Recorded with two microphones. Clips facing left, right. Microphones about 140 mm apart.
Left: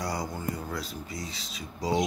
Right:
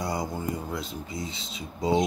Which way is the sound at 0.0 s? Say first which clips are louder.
Right 2 dB; 25° right (ahead or behind).